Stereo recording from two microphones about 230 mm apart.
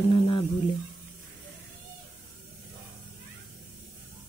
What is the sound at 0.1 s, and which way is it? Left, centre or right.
Speech, left.